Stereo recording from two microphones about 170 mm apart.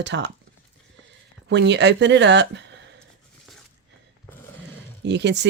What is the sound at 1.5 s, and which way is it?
Speech, 90° right.